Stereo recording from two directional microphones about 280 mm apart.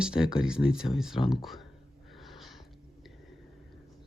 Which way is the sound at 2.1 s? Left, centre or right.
Centre.